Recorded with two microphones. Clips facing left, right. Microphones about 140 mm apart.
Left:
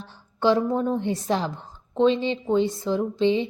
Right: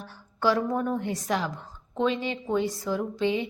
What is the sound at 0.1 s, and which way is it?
A woman's voice, 25° left (ahead or behind).